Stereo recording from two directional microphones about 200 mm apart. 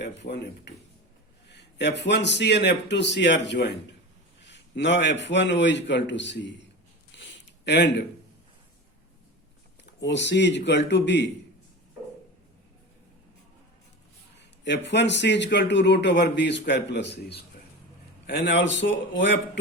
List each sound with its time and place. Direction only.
0.2 s a man's voice: 60° left (ahead or behind)
7.2 s a sound: 60° left (ahead or behind)
10.0 s a man's voice: 60° left (ahead or behind)
14.3 s a man's voice: 60° left (ahead or behind)